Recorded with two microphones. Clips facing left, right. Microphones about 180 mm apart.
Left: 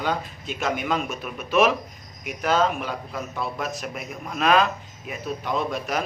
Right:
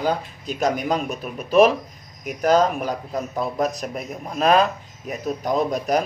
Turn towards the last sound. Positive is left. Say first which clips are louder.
# right 5 dB
turn(degrees=-40)  # may be behind; listen again after turning